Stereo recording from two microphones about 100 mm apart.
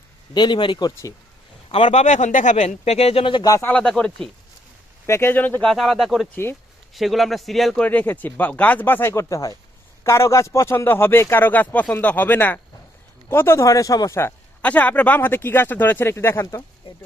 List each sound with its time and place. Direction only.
0.3 s speech: 50° left (ahead or behind)
1.7 s speech: 90° left; by 3.4 s 75° left (ahead or behind)
3.6 s speech: 15° left (ahead or behind)
5.0 s speech: 25° left (ahead or behind)
5.6 s a man's voice: 5° left (ahead or behind)
6.3 s speech: 20° left (ahead or behind)
6.9 s a man's voice: centre (ahead or behind)
7.9 s speech: 15° left (ahead or behind)
14.6 s speech: 15° left (ahead or behind)